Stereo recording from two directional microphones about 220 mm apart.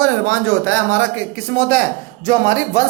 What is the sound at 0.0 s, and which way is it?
A woman's voice, 75° right (ahead or behind).